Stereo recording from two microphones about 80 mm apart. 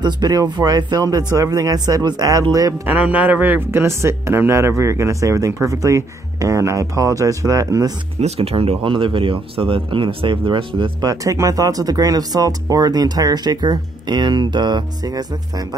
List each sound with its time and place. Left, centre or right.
0.0 s speech: right
2.9 s speech: right
8.8 s speech: right
11.1 s speech: right